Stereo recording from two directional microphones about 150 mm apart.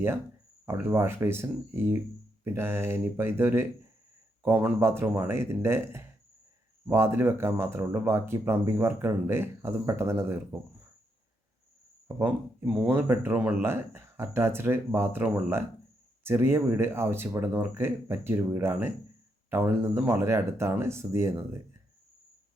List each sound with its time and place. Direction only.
0.6 s speech: 15° right (ahead or behind)
12.0 s speech: 10° right (ahead or behind)